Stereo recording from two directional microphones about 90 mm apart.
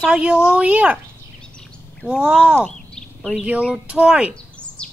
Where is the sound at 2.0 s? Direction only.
10° right (ahead or behind).